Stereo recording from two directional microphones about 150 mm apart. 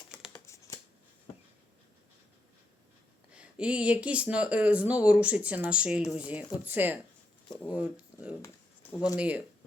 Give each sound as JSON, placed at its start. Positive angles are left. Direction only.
{"t": 0.4, "sound": "computer keyboard", "side_deg": 20}
{"t": 3.3, "sound": "speech", "side_deg": -10}
{"t": 8.4, "sound": "a sound", "side_deg": 10}
{"t": 9.1, "sound": "speech", "side_deg": -10}